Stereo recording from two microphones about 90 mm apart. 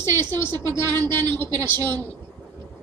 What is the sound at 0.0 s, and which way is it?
A woman's voice, 50° right (ahead or behind).